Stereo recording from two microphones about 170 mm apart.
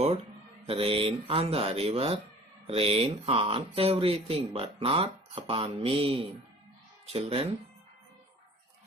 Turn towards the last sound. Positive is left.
turn(degrees=-35)  # may be behind; listen again after turning